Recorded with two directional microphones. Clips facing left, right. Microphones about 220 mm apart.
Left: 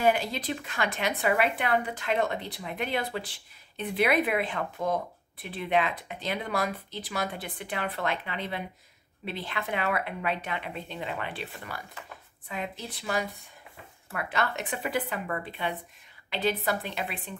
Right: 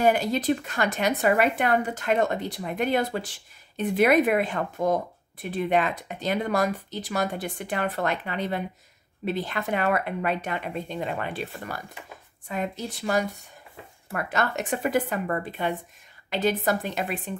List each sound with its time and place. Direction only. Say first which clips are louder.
0.0 s speech: right 4 dB; 45° right (ahead or behind)